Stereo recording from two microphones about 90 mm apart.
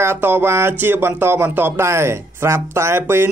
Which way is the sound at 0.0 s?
25° right (ahead or behind).